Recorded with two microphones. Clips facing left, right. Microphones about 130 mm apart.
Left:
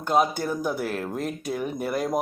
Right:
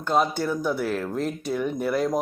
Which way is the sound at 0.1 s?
10° left (ahead or behind).